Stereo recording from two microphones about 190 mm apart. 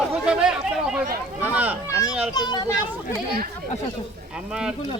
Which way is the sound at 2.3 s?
20° left (ahead or behind).